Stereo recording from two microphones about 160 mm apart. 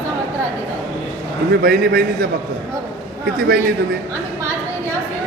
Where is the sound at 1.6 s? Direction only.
65° right (ahead or behind).